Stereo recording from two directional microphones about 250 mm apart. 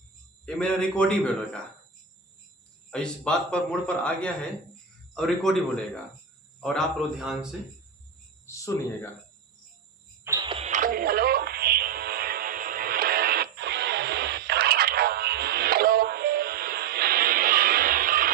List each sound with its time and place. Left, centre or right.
0.4 s a man's voice: centre
2.9 s a man's voice: centre
8.4 s speech: centre
10.2 s music: centre; by 18.3 s right